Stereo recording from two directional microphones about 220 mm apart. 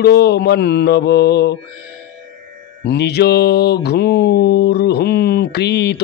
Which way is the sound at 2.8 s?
50° left (ahead or behind).